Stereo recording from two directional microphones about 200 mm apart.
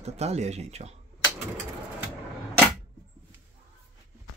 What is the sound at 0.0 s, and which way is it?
Speech, 35° right (ahead or behind).